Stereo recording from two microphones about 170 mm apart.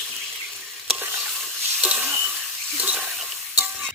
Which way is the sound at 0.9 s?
10° right (ahead or behind).